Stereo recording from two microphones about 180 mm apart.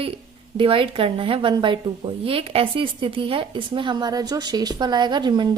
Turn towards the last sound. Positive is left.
turn(degrees=-25)  # may be behind; listen again after turning